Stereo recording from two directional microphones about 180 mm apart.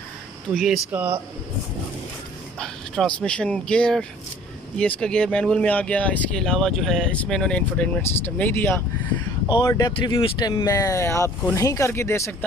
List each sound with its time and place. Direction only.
0.5 s speech: centre (ahead or behind)
0.9 s speech: 10° right (ahead or behind)
2.6 s speech: 5° left (ahead or behind)
9.5 s speech: 20° left (ahead or behind)